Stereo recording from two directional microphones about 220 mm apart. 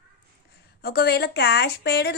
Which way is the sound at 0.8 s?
45° left (ahead or behind).